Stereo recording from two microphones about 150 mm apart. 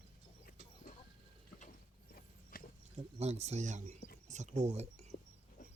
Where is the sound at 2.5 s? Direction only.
80° left.